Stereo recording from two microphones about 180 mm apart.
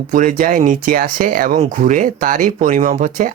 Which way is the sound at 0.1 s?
50° right (ahead or behind).